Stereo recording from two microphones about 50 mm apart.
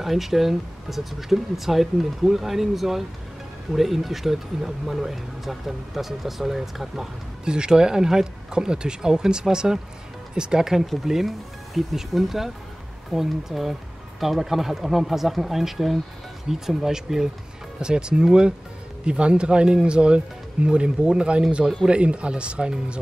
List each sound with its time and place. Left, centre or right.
0.0 s speech: centre
7.4 s speech: centre